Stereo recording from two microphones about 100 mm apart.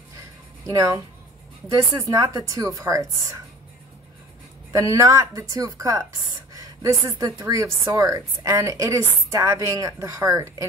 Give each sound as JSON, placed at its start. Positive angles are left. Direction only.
{"t": 0.7, "sound": "speech", "side_deg": -30}
{"t": 4.7, "sound": "speech", "side_deg": -35}